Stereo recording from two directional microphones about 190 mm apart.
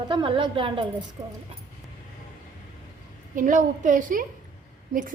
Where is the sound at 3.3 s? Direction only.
45° right (ahead or behind).